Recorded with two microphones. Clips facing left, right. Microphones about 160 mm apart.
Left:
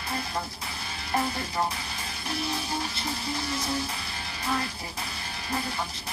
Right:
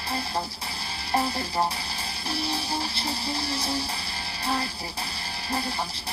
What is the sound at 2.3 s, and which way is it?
Music, 30° right (ahead or behind).